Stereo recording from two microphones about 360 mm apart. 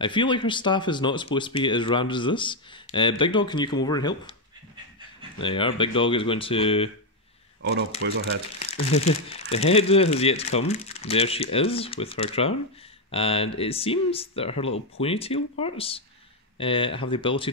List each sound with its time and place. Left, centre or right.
0.0 s speech: centre
5.4 s speech: centre
8.0 s speech: right
8.7 s speech: centre